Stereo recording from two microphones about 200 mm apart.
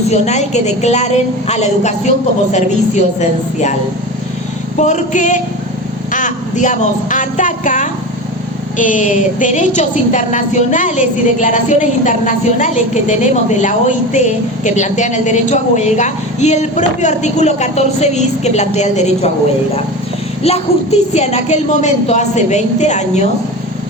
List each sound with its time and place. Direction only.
0.1 s a woman's voice: 35° left (ahead or behind)
4.8 s a woman's voice: 35° left (ahead or behind)
20.4 s a woman's voice: 30° left (ahead or behind)